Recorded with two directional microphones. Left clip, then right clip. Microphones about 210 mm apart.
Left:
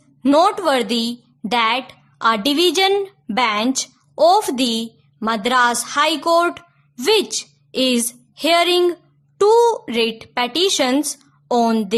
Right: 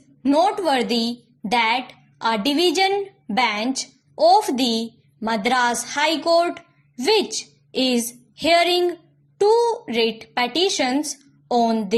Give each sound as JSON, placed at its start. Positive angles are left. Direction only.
{"t": 0.2, "sound": "a woman's voice", "side_deg": 20}